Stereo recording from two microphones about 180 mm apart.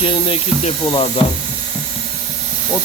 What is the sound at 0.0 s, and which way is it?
Speech, 30° left (ahead or behind).